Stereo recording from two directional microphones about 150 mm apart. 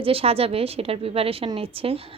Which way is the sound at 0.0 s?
40° right (ahead or behind).